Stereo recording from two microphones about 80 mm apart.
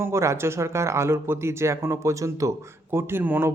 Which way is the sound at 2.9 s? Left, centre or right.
Right.